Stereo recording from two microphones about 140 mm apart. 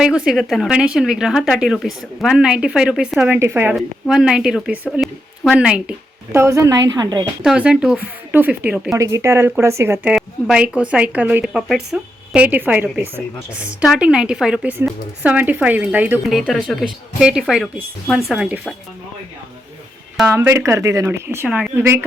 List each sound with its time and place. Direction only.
0.0 s speech: 5° right (ahead or behind)
3.8 s speech: centre (ahead or behind)
6.3 s a woman's voice: 20° right (ahead or behind)
7.4 s speech: 5° right (ahead or behind)
13.8 s speech: 5° right (ahead or behind)
16.5 s speech: centre (ahead or behind)
20.3 s speech: 20° right (ahead or behind)